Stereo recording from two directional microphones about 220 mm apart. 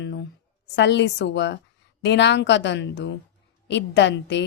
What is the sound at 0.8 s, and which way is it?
A woman's voice, 55° left (ahead or behind).